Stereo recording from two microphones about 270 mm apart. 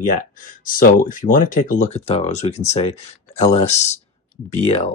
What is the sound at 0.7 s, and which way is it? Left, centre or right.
Speech, left.